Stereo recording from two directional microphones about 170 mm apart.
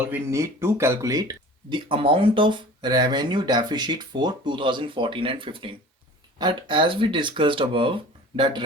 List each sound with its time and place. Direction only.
0.1 s speech: 15° right (ahead or behind)